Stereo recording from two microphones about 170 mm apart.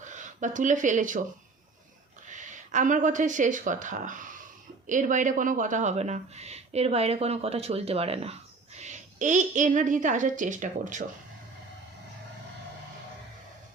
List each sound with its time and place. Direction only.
0.0 s speech: 45° right (ahead or behind)
2.2 s speech: 45° right (ahead or behind)